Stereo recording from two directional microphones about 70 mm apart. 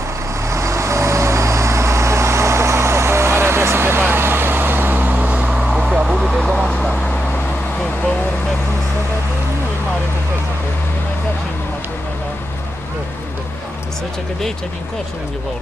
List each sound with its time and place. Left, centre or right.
0.5 s vehicle: right; by 5.6 s centre
5.6 s vehicle: centre
6.7 s vehicle: centre